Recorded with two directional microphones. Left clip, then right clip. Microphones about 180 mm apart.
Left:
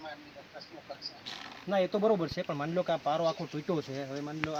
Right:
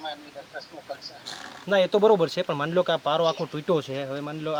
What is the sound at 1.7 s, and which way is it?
Speech, 15° right (ahead or behind).